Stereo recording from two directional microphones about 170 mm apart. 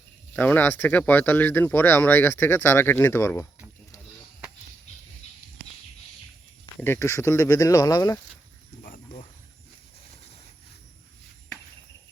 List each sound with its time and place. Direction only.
0.3 s speech: 10° left (ahead or behind)
6.8 s speech: 15° left (ahead or behind)
8.8 s a sound: 50° left (ahead or behind)